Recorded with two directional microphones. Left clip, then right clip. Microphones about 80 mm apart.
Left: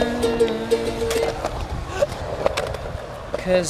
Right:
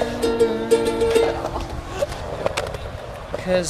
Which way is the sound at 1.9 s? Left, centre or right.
Centre.